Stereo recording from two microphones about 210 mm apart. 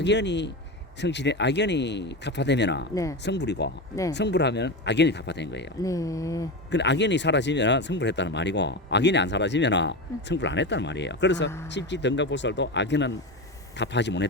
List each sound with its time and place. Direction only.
0.0 s speech: 55° left (ahead or behind)
2.9 s speech: 15° left (ahead or behind)
3.2 s speech: 55° left (ahead or behind)
5.8 s speech: 15° left (ahead or behind)
6.7 s speech: 55° left (ahead or behind)